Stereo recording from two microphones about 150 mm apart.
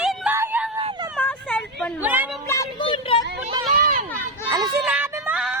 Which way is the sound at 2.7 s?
35° left (ahead or behind).